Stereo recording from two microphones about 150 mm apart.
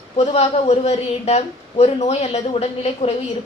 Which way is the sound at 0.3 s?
45° left (ahead or behind).